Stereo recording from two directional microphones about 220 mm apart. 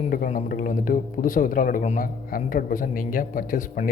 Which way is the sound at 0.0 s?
35° left (ahead or behind).